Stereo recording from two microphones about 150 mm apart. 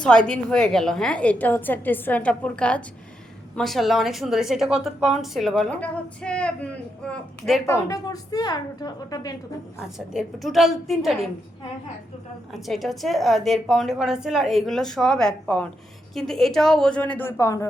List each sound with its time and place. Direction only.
0.0 s a woman's voice: 5° left (ahead or behind)
7.7 s a woman's voice: 25° left (ahead or behind)
10.1 s a woman's voice: centre (ahead or behind)
12.5 s a woman's voice: centre (ahead or behind); by 17.7 s 20° left (ahead or behind)